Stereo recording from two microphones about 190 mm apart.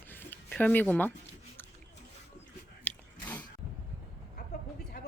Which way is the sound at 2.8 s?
5° left (ahead or behind).